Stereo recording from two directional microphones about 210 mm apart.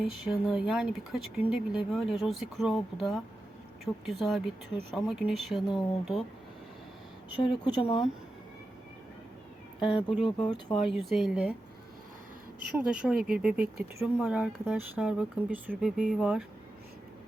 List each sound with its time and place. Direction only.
0.0 s speech: centre (ahead or behind)
7.4 s speech: 20° left (ahead or behind)
9.9 s speech: centre (ahead or behind)
10.4 s speech: 20° left (ahead or behind)
11.1 s speech: centre (ahead or behind)
12.7 s speech: 5° right (ahead or behind)